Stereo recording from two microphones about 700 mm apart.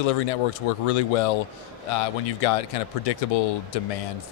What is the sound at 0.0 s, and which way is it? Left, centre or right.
Speech, left.